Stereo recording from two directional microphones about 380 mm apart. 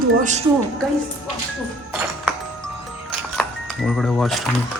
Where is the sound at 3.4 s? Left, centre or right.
Centre.